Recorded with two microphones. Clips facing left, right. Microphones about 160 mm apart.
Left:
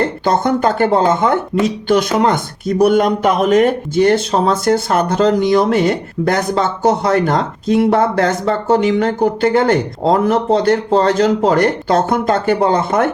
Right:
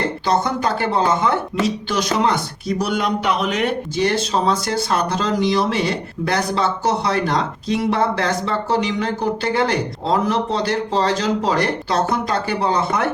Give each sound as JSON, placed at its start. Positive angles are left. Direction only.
{"t": 0.3, "sound": "speech", "side_deg": 50}